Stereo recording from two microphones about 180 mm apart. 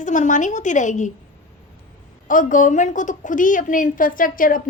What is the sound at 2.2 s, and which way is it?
A woman's voice, 50° left (ahead or behind).